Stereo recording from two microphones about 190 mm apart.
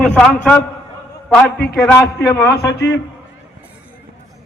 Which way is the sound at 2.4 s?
60° left (ahead or behind).